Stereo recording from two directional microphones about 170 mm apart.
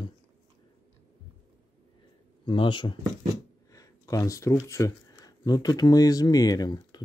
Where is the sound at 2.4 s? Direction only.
30° left (ahead or behind).